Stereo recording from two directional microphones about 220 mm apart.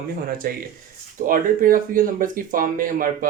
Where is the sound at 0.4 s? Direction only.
40° right (ahead or behind).